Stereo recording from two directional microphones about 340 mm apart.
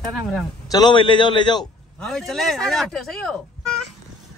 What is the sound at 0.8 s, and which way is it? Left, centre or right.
Speech, centre.